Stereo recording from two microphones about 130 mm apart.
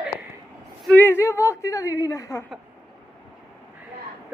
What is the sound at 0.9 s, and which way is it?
A woman's voice, 15° left (ahead or behind).